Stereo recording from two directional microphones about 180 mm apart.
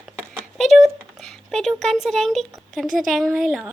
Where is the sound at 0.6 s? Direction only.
Centre (ahead or behind).